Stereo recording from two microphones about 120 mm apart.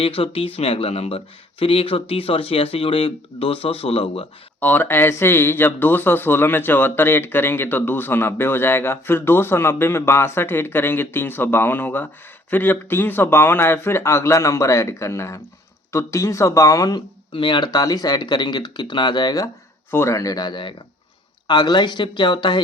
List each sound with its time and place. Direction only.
0.0 s speech: 50° left (ahead or behind)
4.6 s speech: 15° left (ahead or behind)
17.3 s speech: 40° left (ahead or behind)
19.9 s speech: 20° left (ahead or behind); by 22.6 s 40° left (ahead or behind)